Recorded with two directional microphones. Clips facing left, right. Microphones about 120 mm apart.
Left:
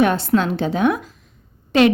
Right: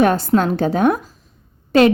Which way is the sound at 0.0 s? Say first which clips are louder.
Right 2 dB; 40° right (ahead or behind).